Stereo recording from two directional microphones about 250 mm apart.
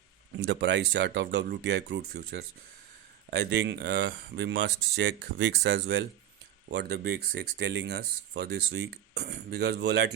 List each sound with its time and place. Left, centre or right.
0.3 s speech: right